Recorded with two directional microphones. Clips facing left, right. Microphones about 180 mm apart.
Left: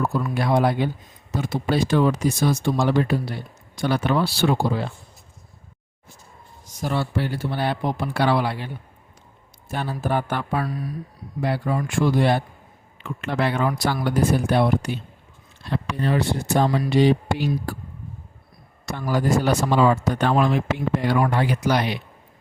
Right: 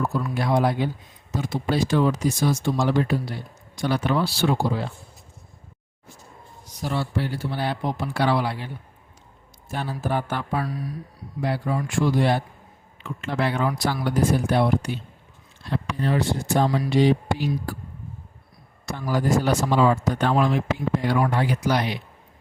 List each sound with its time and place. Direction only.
0.3 s speech: 65° left (ahead or behind)
6.8 s speech: 60° left (ahead or behind)
9.7 s speech: 60° left (ahead or behind)
16.0 s speech: 65° left (ahead or behind)
18.9 s speech: 65° left (ahead or behind)